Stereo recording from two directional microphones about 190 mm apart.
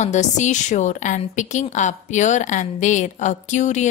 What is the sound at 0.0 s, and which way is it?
Speech, 40° left (ahead or behind).